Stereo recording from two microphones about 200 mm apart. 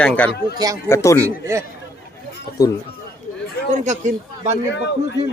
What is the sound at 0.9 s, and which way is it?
Speech, 15° left (ahead or behind).